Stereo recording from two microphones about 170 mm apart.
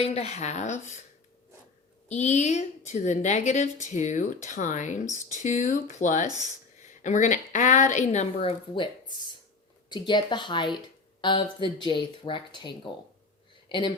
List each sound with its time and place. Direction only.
0.0 s speech: 40° left (ahead or behind)
2.0 s a woman's voice: 40° left (ahead or behind)